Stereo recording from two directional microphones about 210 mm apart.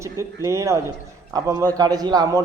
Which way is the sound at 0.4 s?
15° right (ahead or behind).